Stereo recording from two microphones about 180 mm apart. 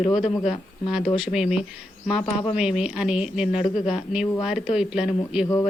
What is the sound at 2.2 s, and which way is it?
Speech, 30° left (ahead or behind).